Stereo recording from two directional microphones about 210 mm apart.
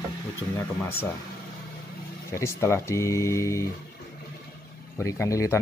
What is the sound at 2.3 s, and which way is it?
Speech, 15° left (ahead or behind).